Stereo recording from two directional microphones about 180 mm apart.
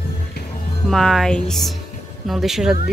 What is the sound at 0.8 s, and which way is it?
Speech, centre (ahead or behind).